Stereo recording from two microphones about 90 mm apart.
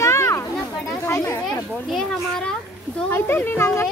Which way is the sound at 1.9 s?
5° left (ahead or behind).